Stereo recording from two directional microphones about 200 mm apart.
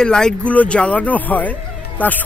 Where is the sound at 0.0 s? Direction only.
5° left (ahead or behind).